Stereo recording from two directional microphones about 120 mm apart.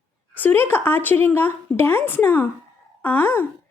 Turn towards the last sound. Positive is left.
turn(degrees=15)  # may be behind; listen again after turning